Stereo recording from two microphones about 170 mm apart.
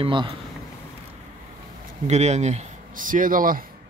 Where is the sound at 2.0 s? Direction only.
40° right (ahead or behind).